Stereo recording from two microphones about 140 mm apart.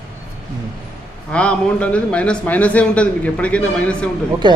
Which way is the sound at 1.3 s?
10° left (ahead or behind).